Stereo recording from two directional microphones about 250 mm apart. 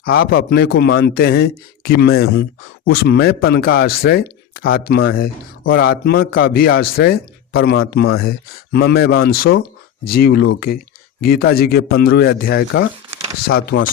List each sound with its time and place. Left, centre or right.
0.0 s speech: left
13.7 s speech: left